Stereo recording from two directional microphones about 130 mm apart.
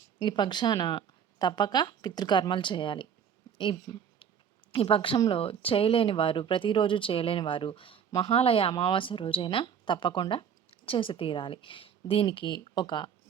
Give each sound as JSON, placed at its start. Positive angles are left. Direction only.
{"t": 0.2, "sound": "speech", "side_deg": 35}